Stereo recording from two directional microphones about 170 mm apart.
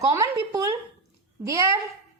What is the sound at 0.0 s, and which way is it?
A woman's voice, 20° right (ahead or behind).